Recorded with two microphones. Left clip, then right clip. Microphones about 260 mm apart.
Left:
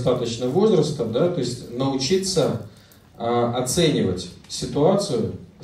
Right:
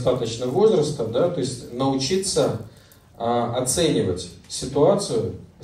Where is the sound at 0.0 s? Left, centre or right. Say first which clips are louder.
Even; right.